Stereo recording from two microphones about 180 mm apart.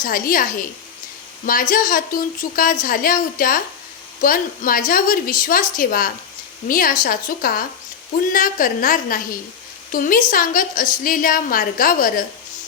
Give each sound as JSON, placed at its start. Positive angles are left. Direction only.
{"t": 0.0, "sound": "a woman's voice", "side_deg": 50}